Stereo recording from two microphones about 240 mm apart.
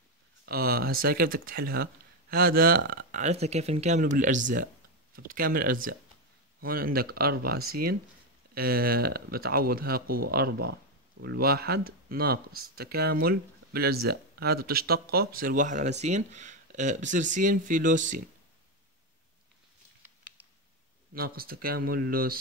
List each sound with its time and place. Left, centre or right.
0.5 s speech: right
21.1 s speech: right